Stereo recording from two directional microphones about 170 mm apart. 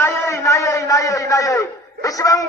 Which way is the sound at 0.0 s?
15° left (ahead or behind).